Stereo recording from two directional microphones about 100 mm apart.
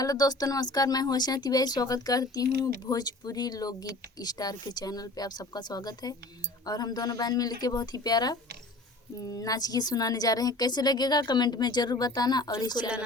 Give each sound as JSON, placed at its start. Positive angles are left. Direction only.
{"t": 0.0, "sound": "a woman's voice", "side_deg": 40}